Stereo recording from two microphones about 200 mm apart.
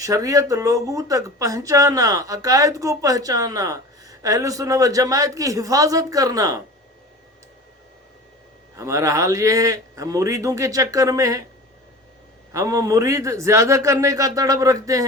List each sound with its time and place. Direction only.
0.0 s speech: 15° right (ahead or behind)
8.7 s speech: 15° right (ahead or behind)
12.5 s speech: 15° right (ahead or behind)